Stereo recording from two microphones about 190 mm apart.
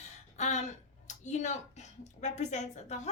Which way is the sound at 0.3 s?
35° left (ahead or behind).